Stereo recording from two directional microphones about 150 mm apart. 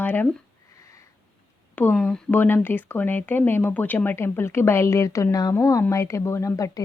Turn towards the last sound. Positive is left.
turn(degrees=20)  # may be behind; listen again after turning